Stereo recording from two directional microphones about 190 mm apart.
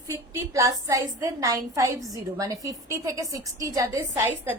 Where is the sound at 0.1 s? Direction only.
15° right (ahead or behind).